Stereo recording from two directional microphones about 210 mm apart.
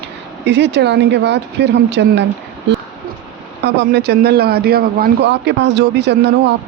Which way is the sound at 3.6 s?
50° right (ahead or behind).